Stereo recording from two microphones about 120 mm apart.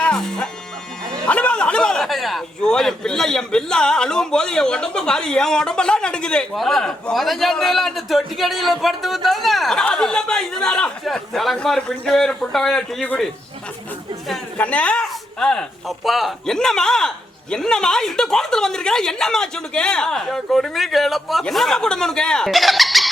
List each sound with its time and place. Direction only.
0.0 s music: 5° left (ahead or behind)
1.1 s a man's voice: 10° left (ahead or behind)
14.6 s a man's voice: 10° left (ahead or behind)